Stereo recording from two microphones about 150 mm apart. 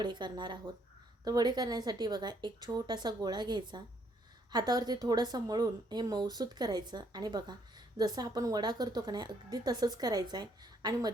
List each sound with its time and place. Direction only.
0.0 s a woman's voice: 30° right (ahead or behind)